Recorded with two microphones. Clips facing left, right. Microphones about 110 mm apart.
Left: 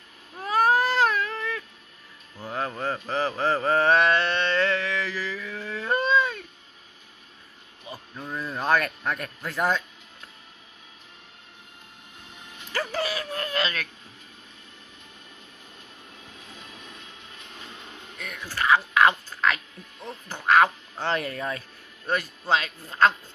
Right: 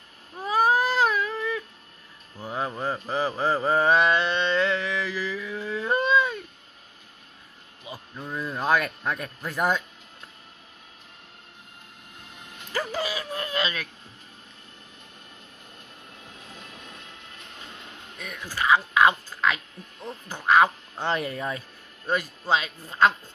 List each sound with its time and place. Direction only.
0.4 s baby cry: 10° right (ahead or behind)
2.3 s mantra: 15° right (ahead or behind)
7.8 s a sound: 10° right (ahead or behind)
8.3 s speech: 5° right (ahead or behind)
12.7 s a sound: 15° right (ahead or behind)
16.4 s vehicle: 50° right (ahead or behind)
18.1 s a sound: 10° right (ahead or behind)
20.0 s quack: 5° right (ahead or behind)
21.0 s speech: 15° right (ahead or behind)